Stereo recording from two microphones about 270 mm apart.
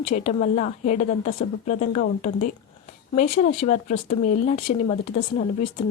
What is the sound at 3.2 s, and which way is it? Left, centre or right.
Speech, left.